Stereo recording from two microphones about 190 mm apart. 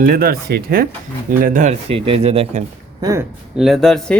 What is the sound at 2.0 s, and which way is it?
Speech, 30° right (ahead or behind).